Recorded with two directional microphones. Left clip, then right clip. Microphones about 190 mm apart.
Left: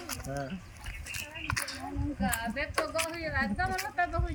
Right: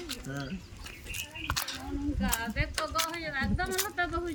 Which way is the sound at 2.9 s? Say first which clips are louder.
Right 1 dB; 40° right (ahead or behind).